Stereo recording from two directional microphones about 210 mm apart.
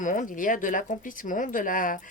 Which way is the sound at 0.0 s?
35° left (ahead or behind).